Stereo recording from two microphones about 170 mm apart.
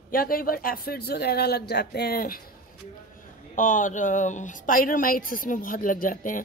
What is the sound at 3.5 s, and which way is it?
Speech, 50° left (ahead or behind).